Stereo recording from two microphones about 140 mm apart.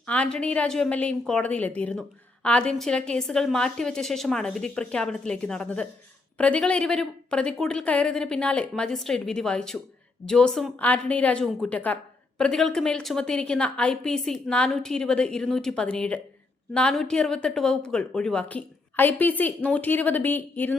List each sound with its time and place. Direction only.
0.0 s a woman's voice: 10° left (ahead or behind)